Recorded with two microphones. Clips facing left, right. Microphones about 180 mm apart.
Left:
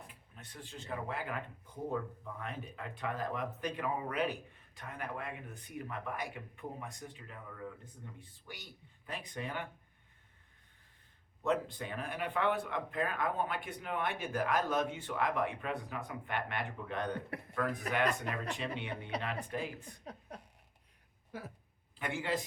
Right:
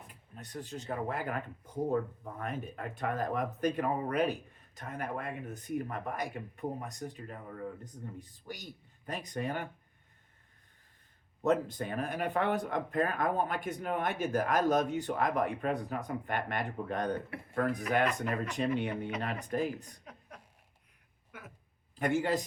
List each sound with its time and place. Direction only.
0.1 s speech: 40° right (ahead or behind)
11.4 s speech: 45° right (ahead or behind)
20.1 s a sound: 35° left (ahead or behind)
21.3 s speech: 30° left (ahead or behind)
21.9 s speech: 45° right (ahead or behind)